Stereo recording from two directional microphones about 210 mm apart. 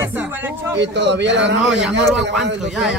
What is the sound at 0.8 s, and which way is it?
Speech, 55° right (ahead or behind).